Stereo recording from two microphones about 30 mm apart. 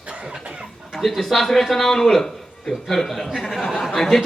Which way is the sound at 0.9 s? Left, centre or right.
Centre.